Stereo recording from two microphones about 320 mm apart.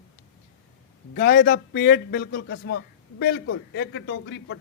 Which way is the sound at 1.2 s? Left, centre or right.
Left.